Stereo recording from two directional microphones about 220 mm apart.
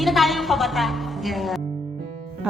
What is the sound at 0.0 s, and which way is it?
A woman's voice, centre (ahead or behind).